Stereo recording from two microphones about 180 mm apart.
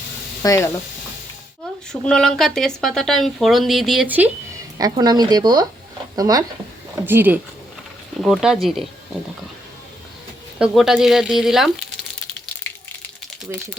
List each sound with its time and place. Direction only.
0.4 s speech: 20° left (ahead or behind)
1.9 s speech: 5° left (ahead or behind)
4.8 s speech: 20° right (ahead or behind); by 8.5 s centre (ahead or behind)
10.6 s speech: 5° right (ahead or behind)